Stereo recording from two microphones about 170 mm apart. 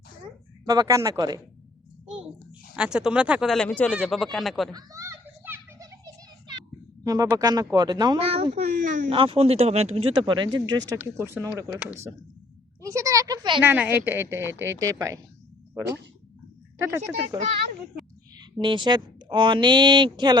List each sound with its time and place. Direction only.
0.6 s speech: 20° right (ahead or behind)
2.0 s a sound: 5° right (ahead or behind)
2.7 s speech: 5° right (ahead or behind)
4.7 s children playing: 20° right (ahead or behind)
7.0 s speech: 20° right (ahead or behind); by 9.1 s 45° right (ahead or behind)
9.1 s speech: 30° right (ahead or behind)
10.9 s a woman's voice: 10° right (ahead or behind)
13.6 s a woman's voice: 10° right (ahead or behind)
16.7 s speech: 15° right (ahead or behind)
18.6 s speech: 30° right (ahead or behind)